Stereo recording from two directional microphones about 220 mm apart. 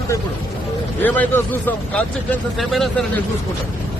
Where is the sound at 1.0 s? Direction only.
5° left (ahead or behind).